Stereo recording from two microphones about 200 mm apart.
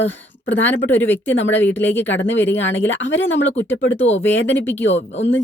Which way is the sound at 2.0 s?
65° left (ahead or behind).